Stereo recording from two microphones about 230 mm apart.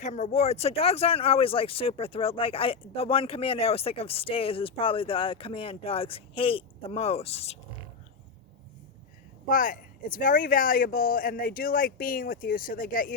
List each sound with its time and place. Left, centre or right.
0.0 s speech: left
9.5 s speech: left